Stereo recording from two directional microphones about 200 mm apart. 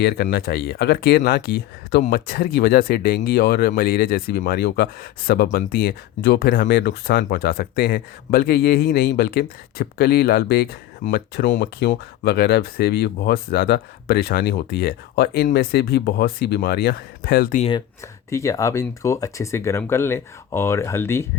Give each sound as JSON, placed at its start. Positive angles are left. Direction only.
{"t": 0.0, "sound": "speech", "side_deg": 50}
{"t": 17.6, "sound": "speech", "side_deg": 25}
{"t": 18.0, "sound": "speech", "side_deg": 15}